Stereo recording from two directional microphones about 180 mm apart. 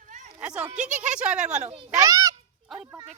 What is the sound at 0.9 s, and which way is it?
Speech, 40° right (ahead or behind).